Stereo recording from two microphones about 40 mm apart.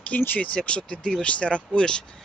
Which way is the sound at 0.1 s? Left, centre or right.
Left.